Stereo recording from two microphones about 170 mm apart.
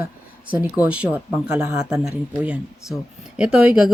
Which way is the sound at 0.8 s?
5° right (ahead or behind).